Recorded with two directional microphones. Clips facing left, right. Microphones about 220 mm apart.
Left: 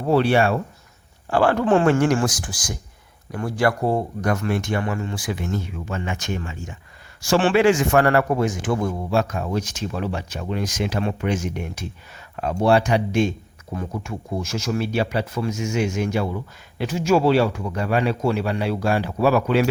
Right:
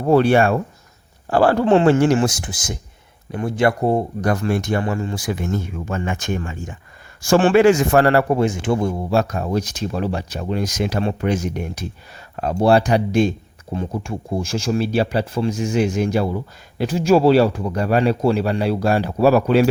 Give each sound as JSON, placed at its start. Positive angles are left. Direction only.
{"t": 0.0, "sound": "speech", "side_deg": -45}
{"t": 1.3, "sound": "speech", "side_deg": -35}
{"t": 4.2, "sound": "speech", "side_deg": -35}